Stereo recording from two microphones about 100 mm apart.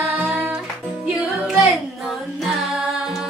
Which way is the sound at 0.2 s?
20° right (ahead or behind).